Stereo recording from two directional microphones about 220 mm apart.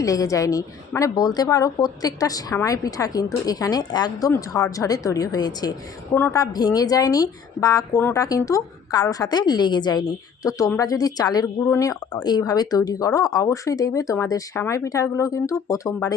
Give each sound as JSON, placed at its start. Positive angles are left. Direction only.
{"t": 0.0, "sound": "a woman's voice", "side_deg": 15}